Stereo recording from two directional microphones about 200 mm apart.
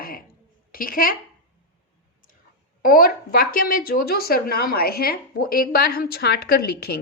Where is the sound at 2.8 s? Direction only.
45° left (ahead or behind).